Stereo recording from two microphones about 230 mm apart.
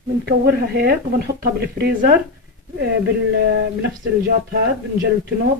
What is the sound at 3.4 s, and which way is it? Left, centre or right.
Speech, right.